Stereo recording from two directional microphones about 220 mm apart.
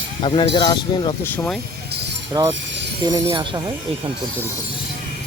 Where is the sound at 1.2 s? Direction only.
10° left (ahead or behind).